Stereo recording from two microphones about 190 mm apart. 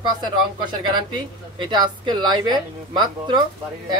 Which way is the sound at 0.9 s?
25° right (ahead or behind).